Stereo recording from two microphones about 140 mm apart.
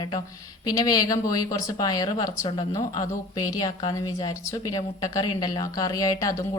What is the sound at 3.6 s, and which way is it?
A woman's voice, 25° left (ahead or behind).